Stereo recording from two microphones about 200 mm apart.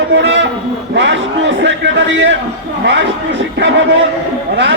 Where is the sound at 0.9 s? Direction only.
65° right (ahead or behind).